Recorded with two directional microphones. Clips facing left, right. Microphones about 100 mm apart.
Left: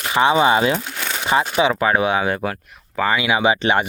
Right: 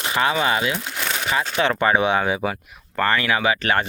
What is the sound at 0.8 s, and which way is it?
Crumpling, centre (ahead or behind).